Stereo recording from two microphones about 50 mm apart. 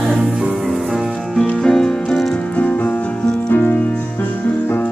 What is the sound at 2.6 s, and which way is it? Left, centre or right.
Music, left.